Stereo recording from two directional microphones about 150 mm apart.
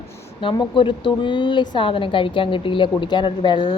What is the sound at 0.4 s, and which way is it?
Speech, 35° left (ahead or behind).